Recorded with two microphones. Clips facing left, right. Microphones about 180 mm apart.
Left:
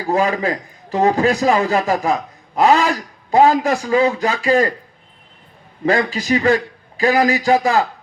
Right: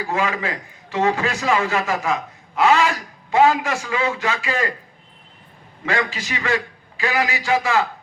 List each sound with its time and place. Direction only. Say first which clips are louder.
0.0 s a man's voice: left 5 dB; 35° left (ahead or behind)
5.8 s a man's voice: left 6 dB; 35° left (ahead or behind)